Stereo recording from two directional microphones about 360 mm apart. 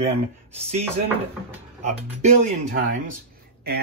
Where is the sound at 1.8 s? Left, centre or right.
Centre.